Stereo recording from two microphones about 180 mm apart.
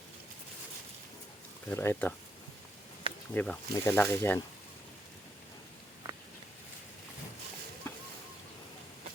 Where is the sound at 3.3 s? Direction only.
5° left (ahead or behind).